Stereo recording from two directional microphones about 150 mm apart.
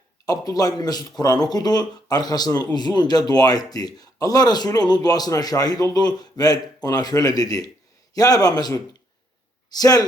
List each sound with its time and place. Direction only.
0.3 s speech: 25° left (ahead or behind)